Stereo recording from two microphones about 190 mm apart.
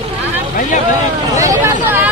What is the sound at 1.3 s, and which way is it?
Speech, 15° right (ahead or behind).